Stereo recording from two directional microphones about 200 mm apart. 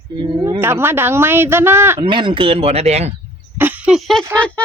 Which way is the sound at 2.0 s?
25° right (ahead or behind).